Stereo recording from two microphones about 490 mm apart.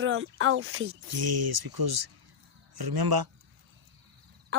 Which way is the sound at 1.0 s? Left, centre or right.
Right.